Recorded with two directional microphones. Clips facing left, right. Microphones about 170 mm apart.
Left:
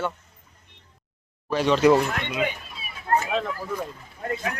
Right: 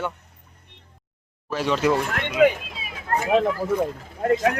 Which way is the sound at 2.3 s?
90° right.